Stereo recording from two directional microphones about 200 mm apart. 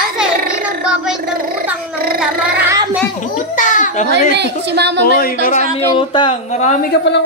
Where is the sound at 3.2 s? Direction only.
40° left (ahead or behind).